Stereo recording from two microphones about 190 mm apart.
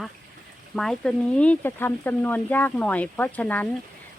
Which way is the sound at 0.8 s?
5° left (ahead or behind).